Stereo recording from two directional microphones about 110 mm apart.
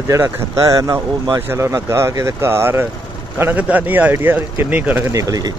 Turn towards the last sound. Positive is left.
turn(degrees=-35)  # may be behind; listen again after turning